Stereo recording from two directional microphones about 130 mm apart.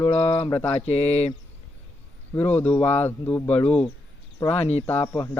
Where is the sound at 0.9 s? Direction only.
55° left (ahead or behind).